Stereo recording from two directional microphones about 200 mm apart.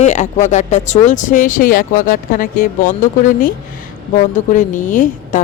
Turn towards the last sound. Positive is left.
turn(degrees=40)  # may be behind; listen again after turning